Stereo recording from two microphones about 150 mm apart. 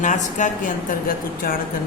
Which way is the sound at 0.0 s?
55° left (ahead or behind).